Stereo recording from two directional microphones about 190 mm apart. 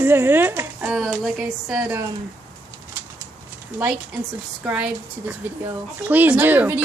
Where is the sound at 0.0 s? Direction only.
10° right (ahead or behind).